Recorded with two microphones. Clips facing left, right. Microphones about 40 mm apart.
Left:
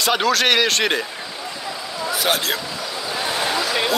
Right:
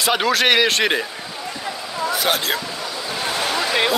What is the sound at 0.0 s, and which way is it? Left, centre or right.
A man's voice, centre.